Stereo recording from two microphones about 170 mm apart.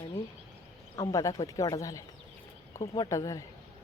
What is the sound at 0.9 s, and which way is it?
Speech, 20° left (ahead or behind).